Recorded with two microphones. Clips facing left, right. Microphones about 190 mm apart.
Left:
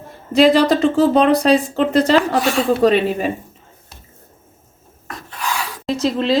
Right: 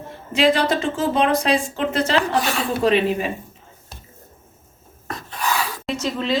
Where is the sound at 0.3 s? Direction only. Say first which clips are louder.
Left 6 dB; 35° left (ahead or behind).